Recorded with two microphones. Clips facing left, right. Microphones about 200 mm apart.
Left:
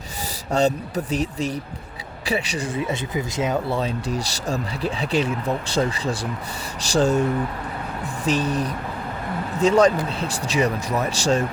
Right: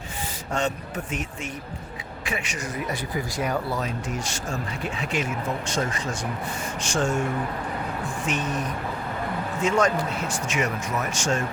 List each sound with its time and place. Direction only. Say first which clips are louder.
0.5 s speech: left 7 dB; 35° left (ahead or behind)